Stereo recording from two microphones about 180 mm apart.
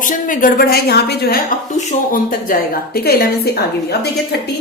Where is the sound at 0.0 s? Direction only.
45° left (ahead or behind).